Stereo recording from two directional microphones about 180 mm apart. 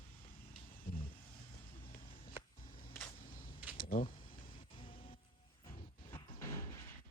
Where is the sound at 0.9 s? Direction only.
55° left (ahead or behind).